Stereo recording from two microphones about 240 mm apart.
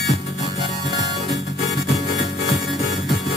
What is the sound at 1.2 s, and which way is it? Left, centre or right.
Music, centre.